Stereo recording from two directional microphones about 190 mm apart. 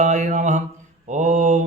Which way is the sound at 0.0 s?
40° right (ahead or behind).